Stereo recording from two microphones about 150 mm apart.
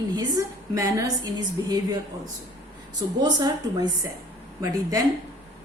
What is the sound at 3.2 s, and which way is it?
A woman's voice, 25° right (ahead or behind).